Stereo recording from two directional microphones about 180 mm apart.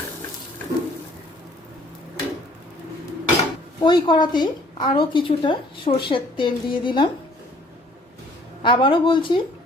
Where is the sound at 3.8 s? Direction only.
25° left (ahead or behind).